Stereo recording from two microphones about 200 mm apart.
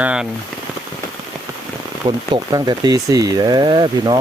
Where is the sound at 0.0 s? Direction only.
5° right (ahead or behind).